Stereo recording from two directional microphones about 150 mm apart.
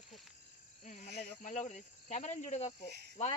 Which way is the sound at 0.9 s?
55° left (ahead or behind).